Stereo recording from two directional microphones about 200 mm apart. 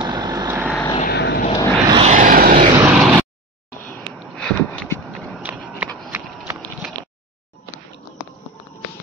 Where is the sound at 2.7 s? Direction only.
15° right (ahead or behind).